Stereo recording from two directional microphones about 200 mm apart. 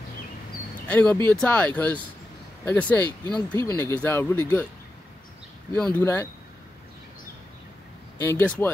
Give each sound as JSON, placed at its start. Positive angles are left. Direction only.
{"t": 0.8, "sound": "speech", "side_deg": 10}
{"t": 3.3, "sound": "speech", "side_deg": 20}
{"t": 3.7, "sound": "speech", "side_deg": 10}
{"t": 5.9, "sound": "speech", "side_deg": 10}
{"t": 8.2, "sound": "speech", "side_deg": 10}